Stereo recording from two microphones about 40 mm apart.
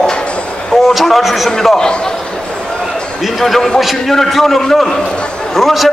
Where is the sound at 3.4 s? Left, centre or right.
Centre.